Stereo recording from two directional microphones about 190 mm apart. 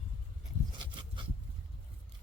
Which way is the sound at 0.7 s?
25° right (ahead or behind).